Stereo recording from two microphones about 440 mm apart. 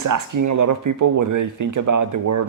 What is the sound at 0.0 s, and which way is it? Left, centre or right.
Speech, right.